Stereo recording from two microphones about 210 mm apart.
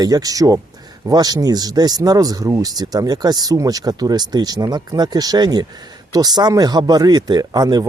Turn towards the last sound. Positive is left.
turn(degrees=-20)  # may be behind; listen again after turning